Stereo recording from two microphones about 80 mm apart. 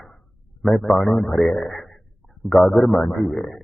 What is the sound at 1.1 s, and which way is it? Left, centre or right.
Speech, left.